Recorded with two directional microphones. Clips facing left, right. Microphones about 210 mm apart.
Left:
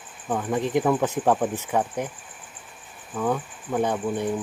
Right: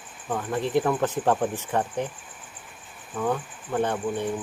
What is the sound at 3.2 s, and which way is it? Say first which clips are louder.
Speech: left 1 dB; 5° left (ahead or behind).